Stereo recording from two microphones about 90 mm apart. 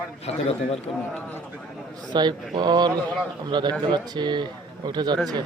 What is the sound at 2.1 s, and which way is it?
Speech, 50° right (ahead or behind).